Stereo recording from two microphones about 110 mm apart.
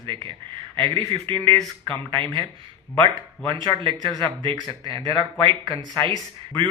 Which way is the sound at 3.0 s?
50° right (ahead or behind).